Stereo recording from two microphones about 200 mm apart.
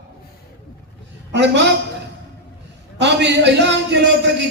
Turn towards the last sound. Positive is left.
turn(degrees=-60)  # may be behind; listen again after turning